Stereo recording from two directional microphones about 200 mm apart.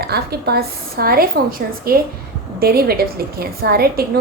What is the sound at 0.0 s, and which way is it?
A woman's voice, 50° right (ahead or behind).